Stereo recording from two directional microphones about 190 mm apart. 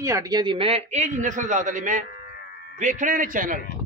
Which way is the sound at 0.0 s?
20° right (ahead or behind).